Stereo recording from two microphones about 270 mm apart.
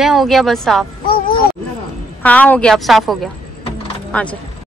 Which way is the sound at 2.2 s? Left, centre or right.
Centre.